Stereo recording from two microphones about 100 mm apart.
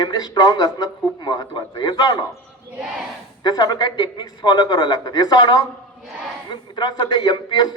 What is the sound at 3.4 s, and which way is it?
A man's voice, 40° left (ahead or behind).